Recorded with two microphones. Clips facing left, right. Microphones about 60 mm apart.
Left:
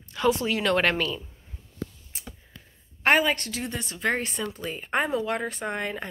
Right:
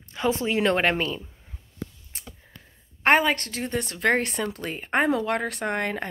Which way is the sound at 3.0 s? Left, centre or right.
Right.